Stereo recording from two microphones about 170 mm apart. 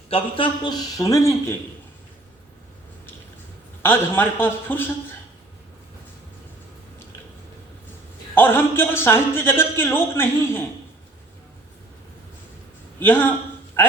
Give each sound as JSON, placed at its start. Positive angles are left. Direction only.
{"t": 0.1, "sound": "a man's voice", "side_deg": 30}
{"t": 3.8, "sound": "a man's voice", "side_deg": 15}
{"t": 8.4, "sound": "a man's voice", "side_deg": 15}
{"t": 13.0, "sound": "a man's voice", "side_deg": 10}
{"t": 13.8, "sound": "a sound", "side_deg": 10}